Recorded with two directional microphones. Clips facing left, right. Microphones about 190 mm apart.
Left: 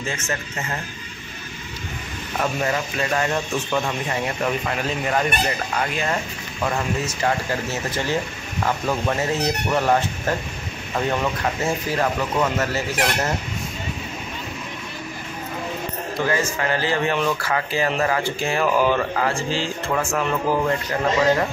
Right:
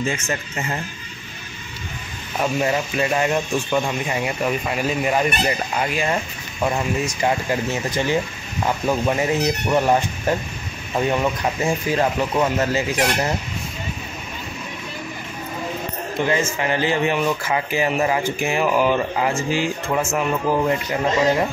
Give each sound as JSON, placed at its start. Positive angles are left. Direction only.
{"t": 2.6, "sound": "speech", "side_deg": -15}
{"t": 16.2, "sound": "speech", "side_deg": -20}